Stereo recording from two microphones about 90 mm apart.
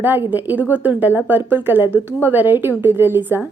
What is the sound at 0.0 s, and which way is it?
A woman's voice, 20° right (ahead or behind).